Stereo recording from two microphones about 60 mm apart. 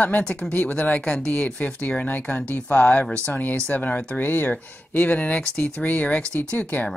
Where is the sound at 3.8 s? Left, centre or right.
Left.